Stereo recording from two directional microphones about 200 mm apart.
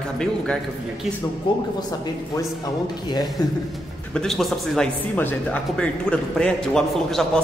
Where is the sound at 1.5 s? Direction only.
25° left (ahead or behind).